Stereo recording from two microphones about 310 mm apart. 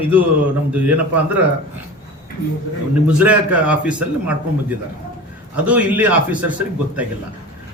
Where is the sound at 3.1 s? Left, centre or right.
Centre.